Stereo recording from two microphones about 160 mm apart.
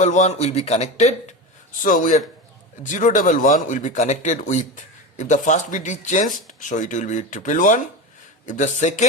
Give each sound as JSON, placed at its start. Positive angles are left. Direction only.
{"t": 0.0, "sound": "speech", "side_deg": 50}